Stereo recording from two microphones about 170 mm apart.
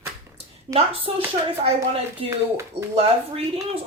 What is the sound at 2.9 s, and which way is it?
Speech, 35° right (ahead or behind).